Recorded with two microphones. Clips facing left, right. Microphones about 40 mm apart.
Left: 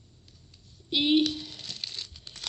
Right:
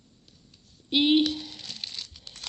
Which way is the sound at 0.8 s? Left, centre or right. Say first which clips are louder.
Right 2 dB; right.